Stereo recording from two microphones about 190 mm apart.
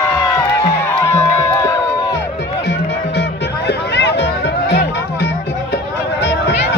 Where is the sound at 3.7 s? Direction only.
60° left (ahead or behind).